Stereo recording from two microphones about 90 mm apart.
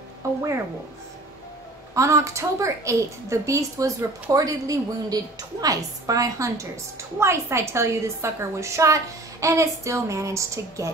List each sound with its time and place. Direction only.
2.0 s a woman's voice: 35° right (ahead or behind)